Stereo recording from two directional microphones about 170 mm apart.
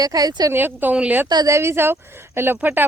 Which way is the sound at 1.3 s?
20° right (ahead or behind).